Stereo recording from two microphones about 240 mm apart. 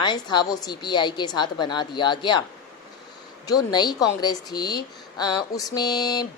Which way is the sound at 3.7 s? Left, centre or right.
Centre.